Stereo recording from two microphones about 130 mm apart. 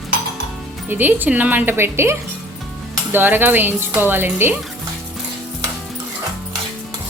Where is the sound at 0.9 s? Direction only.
15° right (ahead or behind).